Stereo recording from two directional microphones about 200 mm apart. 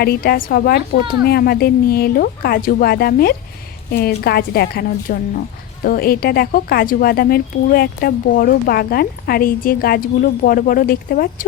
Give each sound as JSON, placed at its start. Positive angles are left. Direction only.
{"t": 0.0, "sound": "a woman's voice", "side_deg": 50}